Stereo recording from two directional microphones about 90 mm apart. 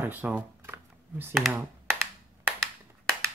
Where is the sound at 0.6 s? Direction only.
25° right (ahead or behind).